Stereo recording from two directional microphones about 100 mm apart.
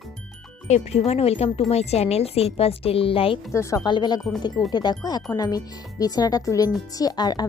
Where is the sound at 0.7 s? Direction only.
90° left; by 3.3 s 65° left (ahead or behind).